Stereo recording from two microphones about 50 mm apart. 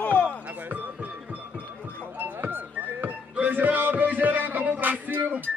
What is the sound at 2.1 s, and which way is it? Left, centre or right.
Music, right.